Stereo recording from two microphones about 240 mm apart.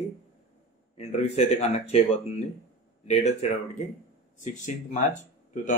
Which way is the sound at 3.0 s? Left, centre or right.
Left.